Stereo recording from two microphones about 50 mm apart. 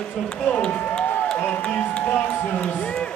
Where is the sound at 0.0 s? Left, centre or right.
Centre.